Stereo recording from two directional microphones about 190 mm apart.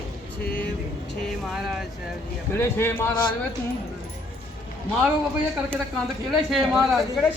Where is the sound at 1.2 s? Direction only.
Centre (ahead or behind).